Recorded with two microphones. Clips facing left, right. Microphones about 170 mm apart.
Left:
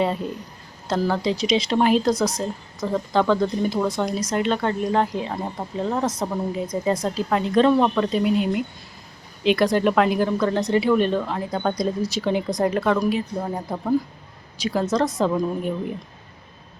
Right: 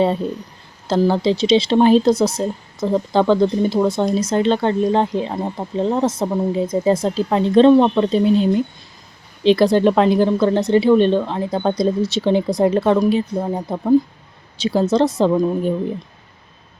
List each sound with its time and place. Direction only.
0.9 s speech: 30° right (ahead or behind)
13.4 s speech: 20° right (ahead or behind)